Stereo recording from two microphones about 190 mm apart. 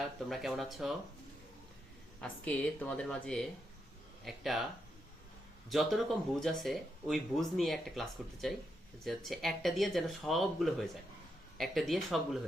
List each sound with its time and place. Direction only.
0.3 s speech: centre (ahead or behind)
2.2 s speech: 5° left (ahead or behind)
5.6 s speech: centre (ahead or behind)